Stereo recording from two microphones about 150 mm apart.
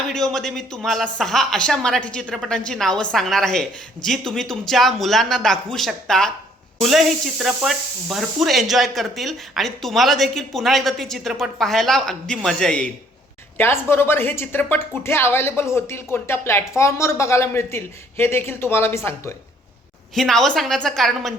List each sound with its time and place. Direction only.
0.1 s speech: 5° left (ahead or behind)
13.6 s speech: 15° left (ahead or behind)
20.1 s speech: centre (ahead or behind)